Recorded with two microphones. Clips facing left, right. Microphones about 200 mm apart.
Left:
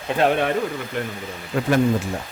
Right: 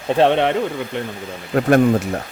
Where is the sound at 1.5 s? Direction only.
55° right (ahead or behind).